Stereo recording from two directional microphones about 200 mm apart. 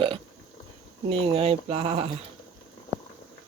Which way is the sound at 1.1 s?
30° right (ahead or behind).